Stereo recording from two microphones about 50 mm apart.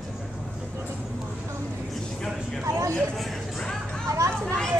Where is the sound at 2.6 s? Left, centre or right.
Right.